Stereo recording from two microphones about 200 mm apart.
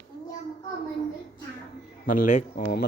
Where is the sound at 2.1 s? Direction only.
40° left (ahead or behind).